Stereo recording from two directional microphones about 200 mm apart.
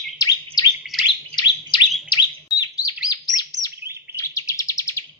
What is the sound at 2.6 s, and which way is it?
Bird, 20° left (ahead or behind).